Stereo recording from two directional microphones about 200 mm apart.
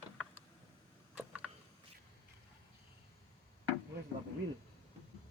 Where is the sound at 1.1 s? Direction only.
5° right (ahead or behind).